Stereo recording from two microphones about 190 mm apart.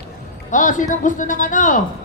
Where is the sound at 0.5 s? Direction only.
45° left (ahead or behind).